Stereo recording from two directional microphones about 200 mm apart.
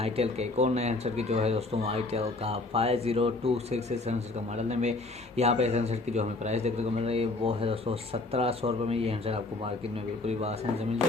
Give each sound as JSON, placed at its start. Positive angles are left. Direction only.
{"t": 0.0, "sound": "speech", "side_deg": -30}